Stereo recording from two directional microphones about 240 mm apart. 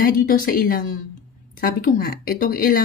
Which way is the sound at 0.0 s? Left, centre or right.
Left.